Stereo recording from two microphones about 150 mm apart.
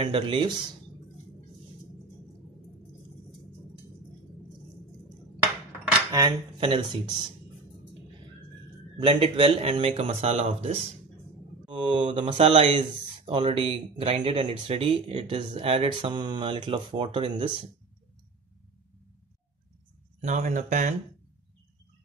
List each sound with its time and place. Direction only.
0.0 s speech: 35° right (ahead or behind)
6.6 s speech: 35° right (ahead or behind)
8.9 s speech: 40° right (ahead or behind)
11.7 s speech: 35° right (ahead or behind)
20.2 s speech: 50° right (ahead or behind)